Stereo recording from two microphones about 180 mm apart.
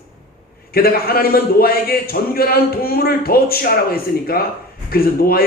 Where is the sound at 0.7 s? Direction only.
55° left (ahead or behind).